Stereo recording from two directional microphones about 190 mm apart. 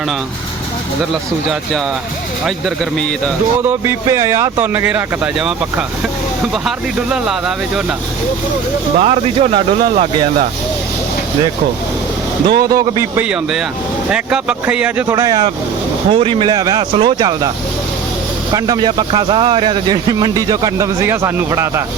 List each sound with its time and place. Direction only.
2.6 s speech: 5° left (ahead or behind)
3.7 s speech: 15° right (ahead or behind)
9.0 s speech: 30° right (ahead or behind)
12.5 s speech: 20° right (ahead or behind)
18.5 s speech: 20° right (ahead or behind)